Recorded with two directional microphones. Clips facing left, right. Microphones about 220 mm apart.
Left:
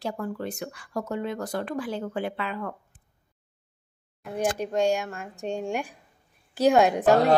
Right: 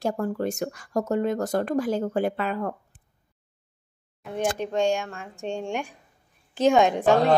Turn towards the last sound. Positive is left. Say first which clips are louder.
# even
turn(degrees=5)  # may be behind; listen again after turning